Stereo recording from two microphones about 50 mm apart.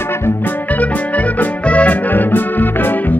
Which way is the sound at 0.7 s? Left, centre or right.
Left.